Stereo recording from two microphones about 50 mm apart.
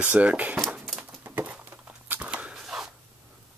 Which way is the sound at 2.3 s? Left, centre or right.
Right.